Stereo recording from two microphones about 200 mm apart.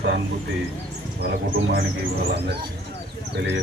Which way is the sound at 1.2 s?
50° right (ahead or behind).